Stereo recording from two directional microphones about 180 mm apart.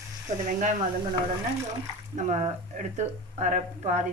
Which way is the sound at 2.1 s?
40° right (ahead or behind).